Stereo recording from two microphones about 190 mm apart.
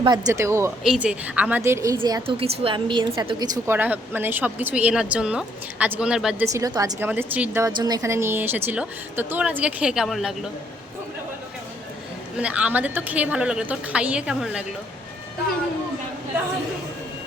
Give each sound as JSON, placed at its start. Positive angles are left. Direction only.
{"t": 0.0, "sound": "a woman's voice", "side_deg": -20}
{"t": 6.5, "sound": "a woman's voice", "side_deg": -20}
{"t": 7.1, "sound": "a woman's voice", "side_deg": -10}
{"t": 7.7, "sound": "a woman's voice", "side_deg": -20}
{"t": 12.4, "sound": "a woman's voice", "side_deg": -5}